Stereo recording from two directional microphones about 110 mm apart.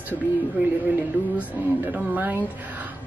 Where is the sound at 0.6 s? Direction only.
15° right (ahead or behind).